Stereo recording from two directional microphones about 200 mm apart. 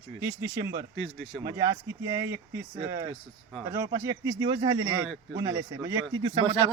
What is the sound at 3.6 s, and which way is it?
A man's voice, 15° right (ahead or behind).